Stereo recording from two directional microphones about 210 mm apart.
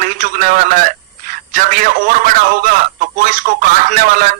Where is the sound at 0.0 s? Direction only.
40° right (ahead or behind).